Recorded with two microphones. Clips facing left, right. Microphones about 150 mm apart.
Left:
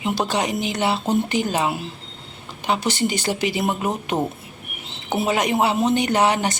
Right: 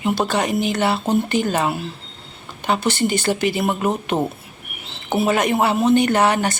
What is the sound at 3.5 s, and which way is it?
Speech, 15° left (ahead or behind).